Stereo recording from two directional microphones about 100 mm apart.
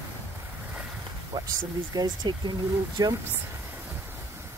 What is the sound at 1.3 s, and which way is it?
Speech, 40° right (ahead or behind).